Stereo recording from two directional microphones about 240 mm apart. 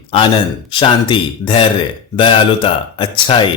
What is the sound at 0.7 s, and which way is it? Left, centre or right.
A man's voice, left.